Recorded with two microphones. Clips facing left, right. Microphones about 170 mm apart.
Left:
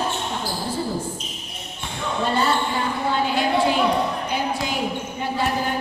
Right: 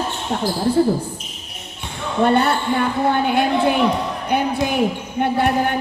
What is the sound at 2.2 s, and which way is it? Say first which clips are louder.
Speech: right 6 dB; 60° right (ahead or behind).